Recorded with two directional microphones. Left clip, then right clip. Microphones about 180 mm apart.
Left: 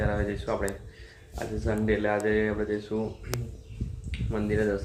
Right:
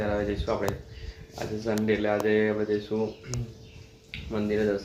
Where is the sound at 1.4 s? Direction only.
5° right (ahead or behind).